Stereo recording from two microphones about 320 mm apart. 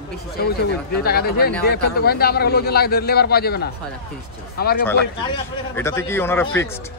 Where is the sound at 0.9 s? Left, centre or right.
Left.